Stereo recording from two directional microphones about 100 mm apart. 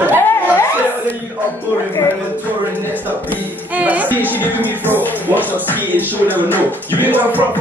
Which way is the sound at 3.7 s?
15° right (ahead or behind).